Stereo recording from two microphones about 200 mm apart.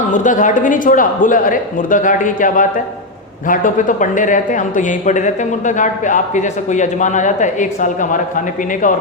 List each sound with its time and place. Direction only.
0.1 s speech: 40° left (ahead or behind)